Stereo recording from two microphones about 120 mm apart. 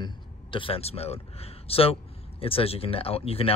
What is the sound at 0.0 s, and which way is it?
Speech, 45° left (ahead or behind).